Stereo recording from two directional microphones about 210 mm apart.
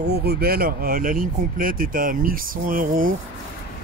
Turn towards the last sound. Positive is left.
turn(degrees=-40)  # may be behind; listen again after turning